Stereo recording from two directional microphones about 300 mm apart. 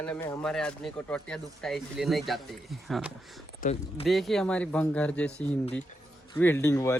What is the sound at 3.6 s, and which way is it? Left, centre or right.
Speech, left.